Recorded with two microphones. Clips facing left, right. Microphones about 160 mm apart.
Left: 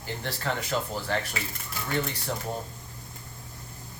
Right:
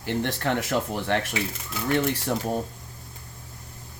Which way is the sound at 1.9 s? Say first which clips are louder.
Right 6 dB; 80° right.